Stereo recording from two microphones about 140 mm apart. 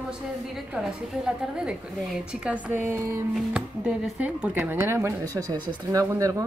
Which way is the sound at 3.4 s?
5° right (ahead or behind).